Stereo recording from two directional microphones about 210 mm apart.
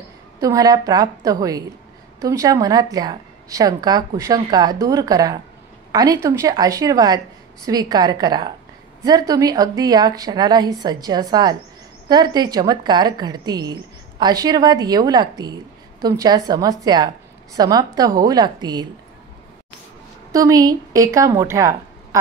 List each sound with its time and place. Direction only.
0.4 s a woman's voice: 15° right (ahead or behind)
20.3 s a woman's voice: 15° right (ahead or behind)